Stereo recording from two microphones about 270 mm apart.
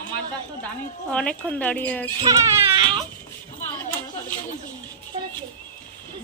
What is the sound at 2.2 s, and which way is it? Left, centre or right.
Baby cry, centre.